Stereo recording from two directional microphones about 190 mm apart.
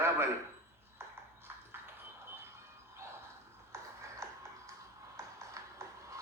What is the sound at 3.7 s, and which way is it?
Music, 15° right (ahead or behind).